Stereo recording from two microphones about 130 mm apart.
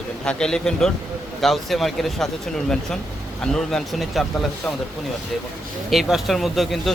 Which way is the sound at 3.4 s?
5° left (ahead or behind).